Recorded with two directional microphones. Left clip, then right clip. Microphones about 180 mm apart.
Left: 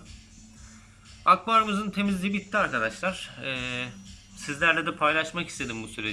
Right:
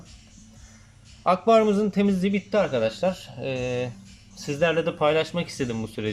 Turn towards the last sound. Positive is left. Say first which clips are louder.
# right 3 dB
turn(degrees=-30)  # may be behind; listen again after turning